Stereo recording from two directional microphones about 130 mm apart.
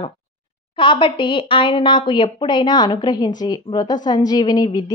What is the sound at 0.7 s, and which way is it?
A woman's voice, 40° left (ahead or behind).